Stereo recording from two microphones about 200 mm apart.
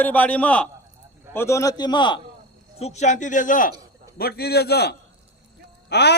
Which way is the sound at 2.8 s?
35° left (ahead or behind).